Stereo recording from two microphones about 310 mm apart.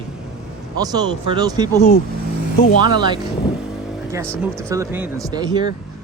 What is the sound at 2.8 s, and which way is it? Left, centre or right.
Speech, centre.